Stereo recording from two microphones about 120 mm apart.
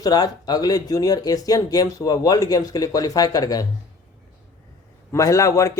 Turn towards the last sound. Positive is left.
turn(degrees=25)  # may be behind; listen again after turning